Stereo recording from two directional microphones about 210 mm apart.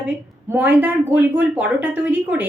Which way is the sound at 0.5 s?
10° right (ahead or behind).